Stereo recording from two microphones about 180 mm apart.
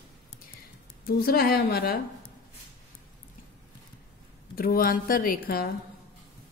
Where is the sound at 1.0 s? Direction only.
60° left (ahead or behind).